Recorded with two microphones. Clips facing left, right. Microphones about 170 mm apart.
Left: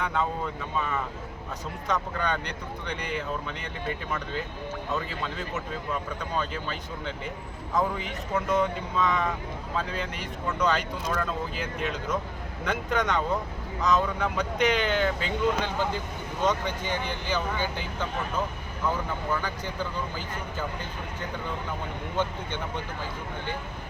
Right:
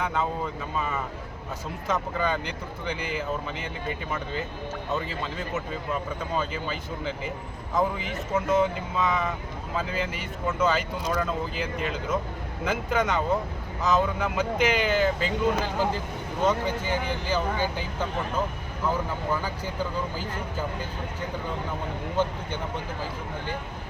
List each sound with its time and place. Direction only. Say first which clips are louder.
0.0 s speech: right 1 dB; centre (ahead or behind)
1.9 s speech: right 2 dB; 5° right (ahead or behind)
6.3 s speech: right 1 dB; 5° right (ahead or behind)
19.3 s speech: even; 5° right (ahead or behind)